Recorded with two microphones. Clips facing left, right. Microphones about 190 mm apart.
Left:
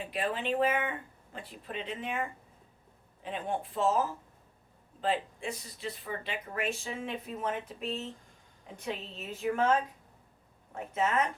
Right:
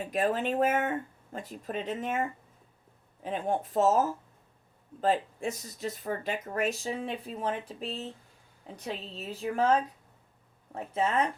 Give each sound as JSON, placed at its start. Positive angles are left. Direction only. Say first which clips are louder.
{"t": 0.0, "sound": "speech", "louder": "right 5 dB", "side_deg": -45}
{"t": 3.2, "sound": "speech", "louder": "right 4 dB", "side_deg": -40}
{"t": 10.9, "sound": "speech", "louder": "right 2 dB", "side_deg": -30}